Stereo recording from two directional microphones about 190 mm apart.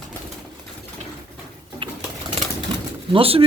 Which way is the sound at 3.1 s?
30° right (ahead or behind).